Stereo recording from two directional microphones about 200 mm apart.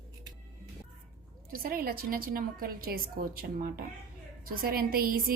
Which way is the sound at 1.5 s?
45° right (ahead or behind).